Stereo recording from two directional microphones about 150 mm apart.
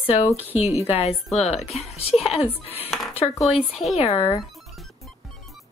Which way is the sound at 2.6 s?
40° left (ahead or behind).